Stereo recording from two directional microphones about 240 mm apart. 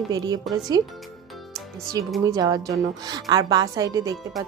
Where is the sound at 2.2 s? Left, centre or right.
Centre.